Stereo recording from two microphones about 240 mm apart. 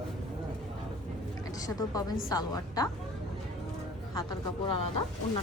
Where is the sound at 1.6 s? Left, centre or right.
Centre.